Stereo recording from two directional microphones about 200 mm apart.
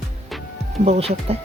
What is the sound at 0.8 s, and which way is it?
Speech, 30° right (ahead or behind).